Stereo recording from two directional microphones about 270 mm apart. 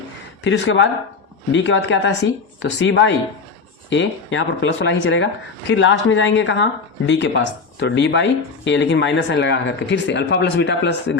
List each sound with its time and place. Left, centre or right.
0.4 s speech: left